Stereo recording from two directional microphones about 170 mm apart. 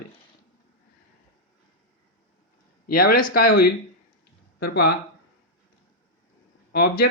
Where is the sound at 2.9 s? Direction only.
60° left (ahead or behind).